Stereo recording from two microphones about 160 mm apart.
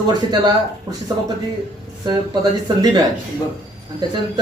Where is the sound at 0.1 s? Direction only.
25° right (ahead or behind).